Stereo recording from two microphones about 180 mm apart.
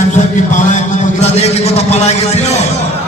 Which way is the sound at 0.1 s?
45° left (ahead or behind).